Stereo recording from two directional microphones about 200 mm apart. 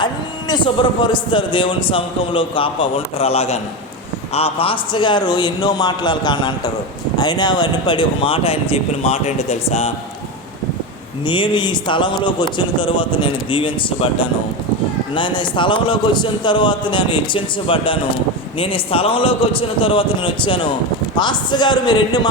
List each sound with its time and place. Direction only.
0.0 s a man's voice: 20° left (ahead or behind)
11.3 s a man's voice: 25° left (ahead or behind)